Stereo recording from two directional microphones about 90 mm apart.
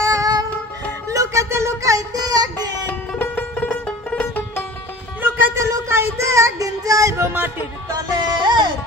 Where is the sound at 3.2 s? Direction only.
20° left (ahead or behind).